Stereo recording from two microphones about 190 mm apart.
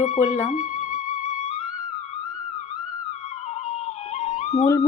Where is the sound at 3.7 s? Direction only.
35° left (ahead or behind).